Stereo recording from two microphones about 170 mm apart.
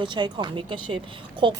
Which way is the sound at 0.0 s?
25° right (ahead or behind).